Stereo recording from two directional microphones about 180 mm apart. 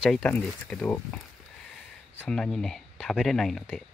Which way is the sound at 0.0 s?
5° left (ahead or behind).